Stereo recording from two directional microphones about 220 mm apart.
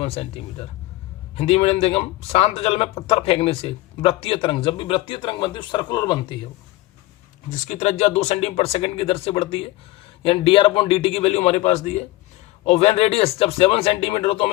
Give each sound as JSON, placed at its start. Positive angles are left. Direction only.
{"t": 0.0, "sound": "a man's voice", "side_deg": 25}
{"t": 7.5, "sound": "a man's voice", "side_deg": 35}